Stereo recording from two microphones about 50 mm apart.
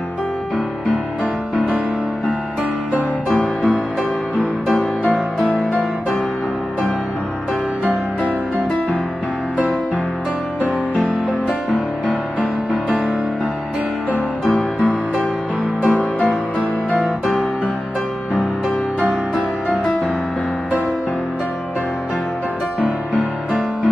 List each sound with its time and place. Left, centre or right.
3.3 s music: left
10.6 s music: right
16.0 s music: left
18.9 s music: right